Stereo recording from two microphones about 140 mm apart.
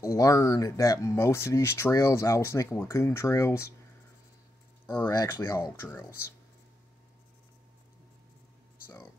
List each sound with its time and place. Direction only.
0.0 s speech: 25° left (ahead or behind)
4.8 s speech: 30° left (ahead or behind)